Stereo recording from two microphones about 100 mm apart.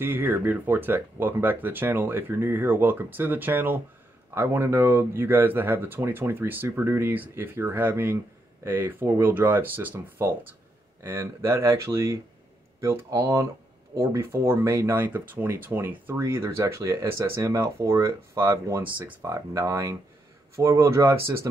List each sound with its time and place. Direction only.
0.0 s speech: 20° right (ahead or behind)
19.3 s speech: 30° right (ahead or behind)